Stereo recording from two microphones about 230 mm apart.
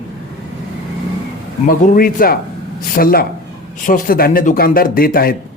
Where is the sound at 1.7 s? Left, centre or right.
Left.